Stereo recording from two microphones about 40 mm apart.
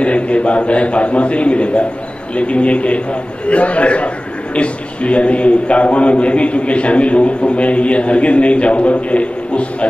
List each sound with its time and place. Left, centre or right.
0.0 s a man's voice: left